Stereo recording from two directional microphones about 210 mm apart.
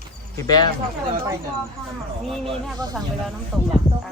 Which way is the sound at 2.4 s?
20° right (ahead or behind).